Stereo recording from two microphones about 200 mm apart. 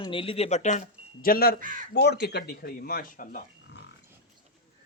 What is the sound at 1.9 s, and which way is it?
Speech, 55° left (ahead or behind).